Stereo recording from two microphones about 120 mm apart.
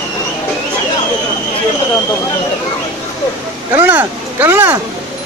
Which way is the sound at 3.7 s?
15° right (ahead or behind).